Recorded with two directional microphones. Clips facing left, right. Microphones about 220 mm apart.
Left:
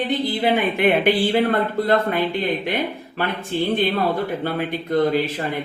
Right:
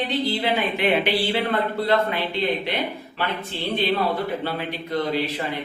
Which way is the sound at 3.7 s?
50° left (ahead or behind).